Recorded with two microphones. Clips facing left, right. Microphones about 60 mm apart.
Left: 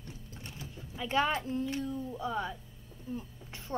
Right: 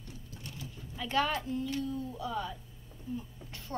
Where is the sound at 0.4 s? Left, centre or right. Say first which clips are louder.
Right 1 dB; left.